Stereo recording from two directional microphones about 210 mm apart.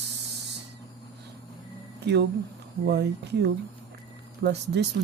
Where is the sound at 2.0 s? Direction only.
55° right (ahead or behind).